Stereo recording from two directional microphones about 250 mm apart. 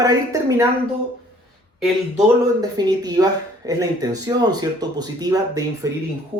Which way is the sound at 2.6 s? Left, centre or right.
Centre.